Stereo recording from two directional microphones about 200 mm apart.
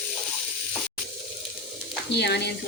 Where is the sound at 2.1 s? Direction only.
55° left (ahead or behind).